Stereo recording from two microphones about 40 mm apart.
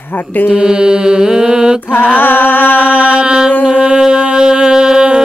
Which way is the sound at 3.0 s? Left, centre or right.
Right.